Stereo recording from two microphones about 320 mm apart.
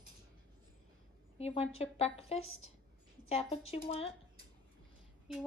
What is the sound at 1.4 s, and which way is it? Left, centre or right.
A woman's voice, centre.